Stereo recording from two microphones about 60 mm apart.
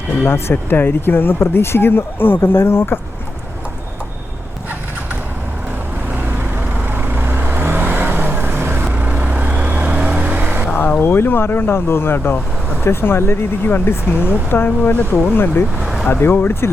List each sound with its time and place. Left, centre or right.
0.2 s speech: left
6.9 s vehicle: right
8.8 s vehicle: right
11.0 s speech: left
15.8 s vehicle: centre
16.2 s speech: left